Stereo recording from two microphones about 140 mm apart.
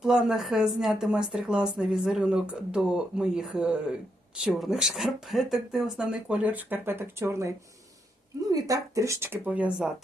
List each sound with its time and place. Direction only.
0.0 s a woman's voice: 5° right (ahead or behind)